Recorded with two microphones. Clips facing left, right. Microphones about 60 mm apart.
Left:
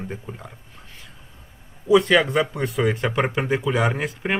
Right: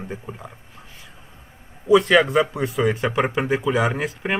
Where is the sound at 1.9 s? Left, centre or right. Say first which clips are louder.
Right 1 dB; centre.